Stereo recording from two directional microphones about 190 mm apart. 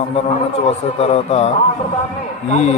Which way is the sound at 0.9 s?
35° left (ahead or behind).